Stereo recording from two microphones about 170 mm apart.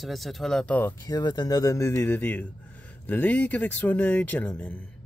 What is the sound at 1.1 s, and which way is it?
Speech, 25° left (ahead or behind).